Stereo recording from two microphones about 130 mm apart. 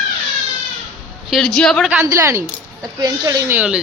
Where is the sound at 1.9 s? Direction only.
20° right (ahead or behind).